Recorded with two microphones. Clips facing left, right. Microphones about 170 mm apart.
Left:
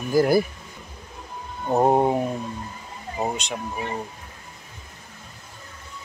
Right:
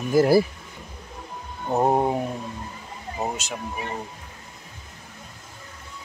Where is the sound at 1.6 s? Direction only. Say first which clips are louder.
Left 2 dB; 10° left (ahead or behind).